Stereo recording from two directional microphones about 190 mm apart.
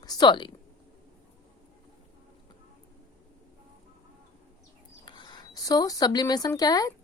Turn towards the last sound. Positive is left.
turn(degrees=20)  # may be behind; listen again after turning